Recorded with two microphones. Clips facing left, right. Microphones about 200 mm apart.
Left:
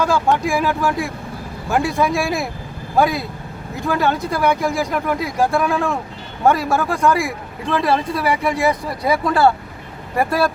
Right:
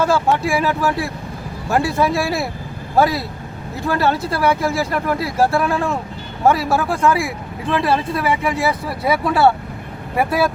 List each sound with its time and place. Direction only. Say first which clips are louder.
0.0 s speech: right 1 dB; 5° right (ahead or behind)